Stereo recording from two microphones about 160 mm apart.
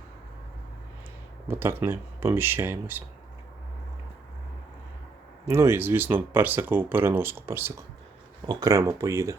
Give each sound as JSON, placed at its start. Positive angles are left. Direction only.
{"t": 1.5, "sound": "speech", "side_deg": -15}
{"t": 5.5, "sound": "speech", "side_deg": -15}